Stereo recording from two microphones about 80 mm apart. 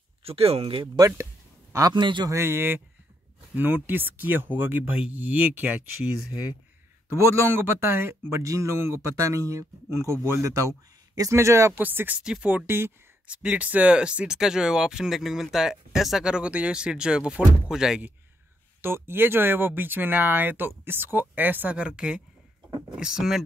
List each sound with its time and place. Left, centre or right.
1.7 s a man's voice: right
2.0 s a man's voice: right
2.2 s speech: right
7.1 s speech: right
11.7 s speech: right
12.2 s speech: centre
12.6 s speech: right
13.3 s speech: centre
18.8 s speech: right; by 23.4 s centre